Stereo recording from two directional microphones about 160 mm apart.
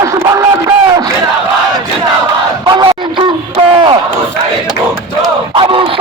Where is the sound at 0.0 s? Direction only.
20° right (ahead or behind).